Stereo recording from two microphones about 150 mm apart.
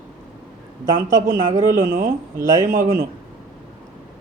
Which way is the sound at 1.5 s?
20° right (ahead or behind).